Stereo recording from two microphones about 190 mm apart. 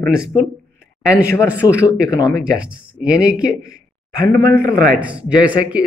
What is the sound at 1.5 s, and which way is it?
Speech, 5° right (ahead or behind).